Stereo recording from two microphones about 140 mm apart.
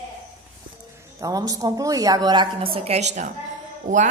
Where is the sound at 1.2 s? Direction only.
25° right (ahead or behind).